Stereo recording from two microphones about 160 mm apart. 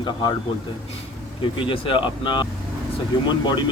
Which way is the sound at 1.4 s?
30° left (ahead or behind).